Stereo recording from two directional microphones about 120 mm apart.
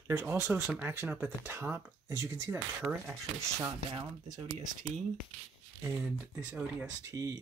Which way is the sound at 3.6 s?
30° right (ahead or behind).